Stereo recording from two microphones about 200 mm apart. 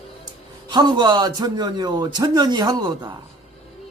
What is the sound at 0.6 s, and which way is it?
A man's voice, 20° right (ahead or behind).